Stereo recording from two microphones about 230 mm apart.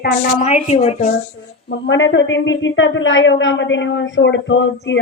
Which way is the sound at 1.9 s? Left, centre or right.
Left.